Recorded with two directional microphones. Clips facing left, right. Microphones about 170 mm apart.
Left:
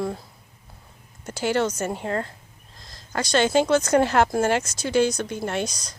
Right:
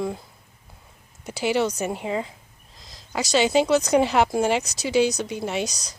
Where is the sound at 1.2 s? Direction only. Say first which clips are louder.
Even; centre (ahead or behind).